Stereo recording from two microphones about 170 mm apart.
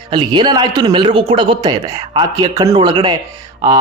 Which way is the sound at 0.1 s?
25° right (ahead or behind).